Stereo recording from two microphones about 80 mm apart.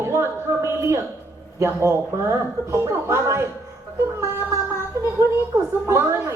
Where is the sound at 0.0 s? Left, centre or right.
Right.